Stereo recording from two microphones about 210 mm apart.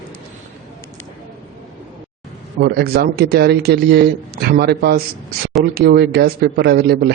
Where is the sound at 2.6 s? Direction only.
50° right (ahead or behind).